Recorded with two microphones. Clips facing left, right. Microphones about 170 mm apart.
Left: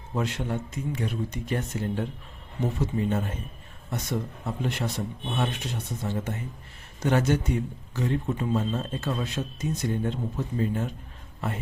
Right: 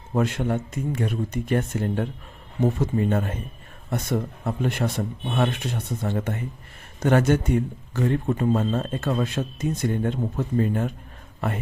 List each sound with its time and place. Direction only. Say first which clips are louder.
0.1 s a man's voice: right 6 dB; 50° right (ahead or behind)